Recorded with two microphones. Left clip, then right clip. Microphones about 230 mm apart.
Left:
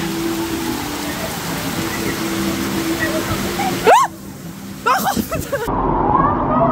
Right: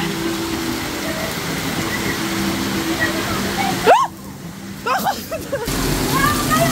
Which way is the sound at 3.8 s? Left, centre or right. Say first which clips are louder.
Left 2 dB; left.